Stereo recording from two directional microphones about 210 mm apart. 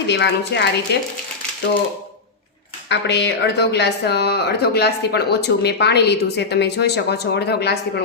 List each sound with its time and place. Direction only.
0.1 s speech: 55° left (ahead or behind)
2.9 s a woman's voice: 55° left (ahead or behind)